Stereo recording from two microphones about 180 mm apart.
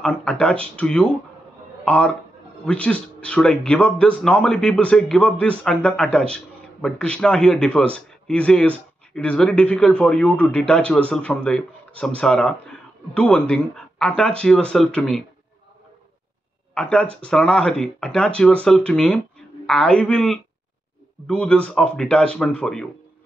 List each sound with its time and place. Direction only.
0.0 s speech: 5° left (ahead or behind)
16.7 s speech: 5° left (ahead or behind)